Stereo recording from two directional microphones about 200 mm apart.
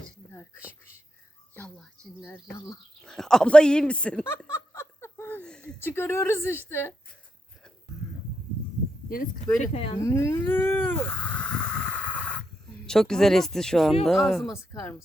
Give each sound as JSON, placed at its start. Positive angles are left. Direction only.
{"t": 1.5, "sound": "music", "side_deg": 5}
{"t": 2.2, "sound": "a woman's voice", "side_deg": 10}
{"t": 9.6, "sound": "speech", "side_deg": 30}
{"t": 10.0, "sound": "a sound", "side_deg": 15}
{"t": 12.8, "sound": "speech", "side_deg": 5}
{"t": 14.5, "sound": "a woman's voice", "side_deg": 15}